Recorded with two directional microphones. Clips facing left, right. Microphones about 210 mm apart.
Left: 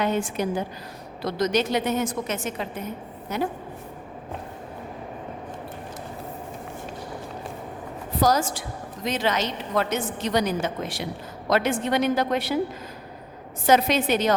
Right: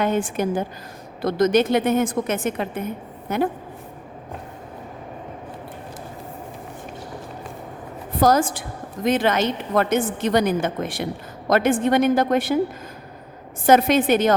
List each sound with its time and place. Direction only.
0.0 s a woman's voice: 50° right (ahead or behind)
8.2 s a woman's voice: 55° right (ahead or behind)
13.7 s a woman's voice: 50° right (ahead or behind)